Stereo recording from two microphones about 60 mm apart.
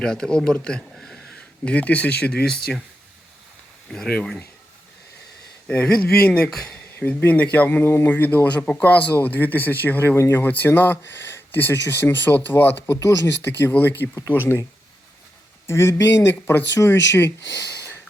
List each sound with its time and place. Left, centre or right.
0.0 s speech: centre
0.9 s a sound: centre
1.6 s speech: left
2.4 s speech: centre
3.8 s speech: centre
5.6 s speech: centre
7.0 s speech: left
15.6 s speech: left